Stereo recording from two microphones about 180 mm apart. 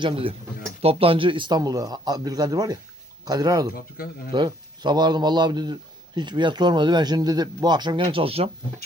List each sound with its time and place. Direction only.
0.0 s speech: 30° right (ahead or behind)
3.8 s speech: 55° left (ahead or behind)
4.3 s speech: 25° right (ahead or behind)